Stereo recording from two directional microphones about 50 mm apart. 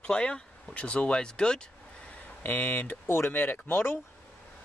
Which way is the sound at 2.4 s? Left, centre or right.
Left.